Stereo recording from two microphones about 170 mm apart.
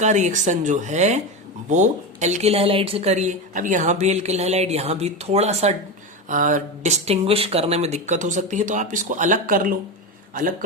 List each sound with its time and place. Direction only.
0.0 s speech: 45° right (ahead or behind)